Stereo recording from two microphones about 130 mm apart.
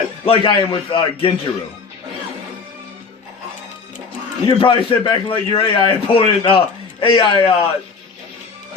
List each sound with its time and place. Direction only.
0.3 s a man's voice: 40° left (ahead or behind)
4.4 s a man's voice: 40° left (ahead or behind)